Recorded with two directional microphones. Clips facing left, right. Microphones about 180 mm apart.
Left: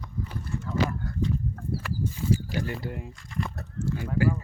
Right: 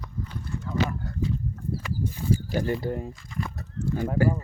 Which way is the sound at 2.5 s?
45° right (ahead or behind).